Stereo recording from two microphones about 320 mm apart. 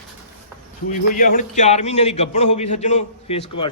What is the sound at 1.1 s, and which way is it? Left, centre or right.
Speech, left.